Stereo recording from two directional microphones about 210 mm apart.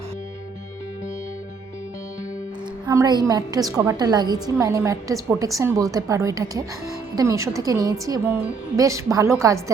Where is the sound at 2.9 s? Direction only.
20° right (ahead or behind).